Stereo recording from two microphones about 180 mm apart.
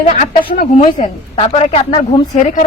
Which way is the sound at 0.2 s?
55° left (ahead or behind).